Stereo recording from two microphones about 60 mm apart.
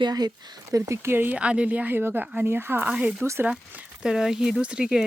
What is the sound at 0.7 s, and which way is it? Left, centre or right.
Speech, right.